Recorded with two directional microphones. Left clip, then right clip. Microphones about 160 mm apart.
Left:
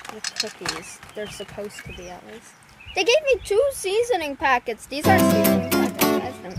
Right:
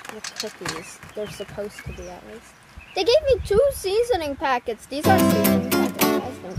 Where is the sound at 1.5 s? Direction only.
15° left (ahead or behind).